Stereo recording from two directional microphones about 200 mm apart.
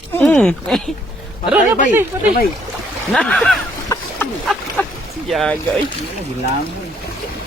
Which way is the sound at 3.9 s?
15° left (ahead or behind).